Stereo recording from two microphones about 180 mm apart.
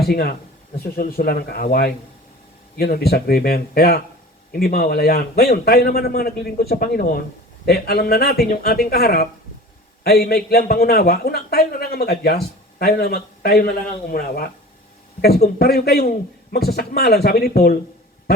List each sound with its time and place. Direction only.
0.0 s a man's voice: 60° left (ahead or behind)
15.5 s a man's voice: 60° left (ahead or behind)